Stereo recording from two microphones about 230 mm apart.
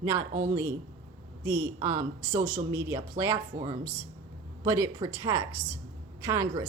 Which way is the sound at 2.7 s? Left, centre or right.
Centre.